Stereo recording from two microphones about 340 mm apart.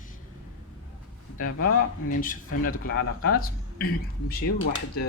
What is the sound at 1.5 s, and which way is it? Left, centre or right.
Speech, left.